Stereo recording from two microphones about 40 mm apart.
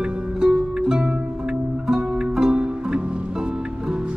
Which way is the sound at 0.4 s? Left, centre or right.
Centre.